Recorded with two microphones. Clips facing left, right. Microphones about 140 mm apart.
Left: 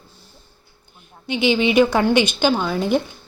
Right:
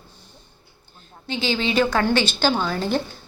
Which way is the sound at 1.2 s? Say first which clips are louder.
Left 6 dB; 20° left (ahead or behind).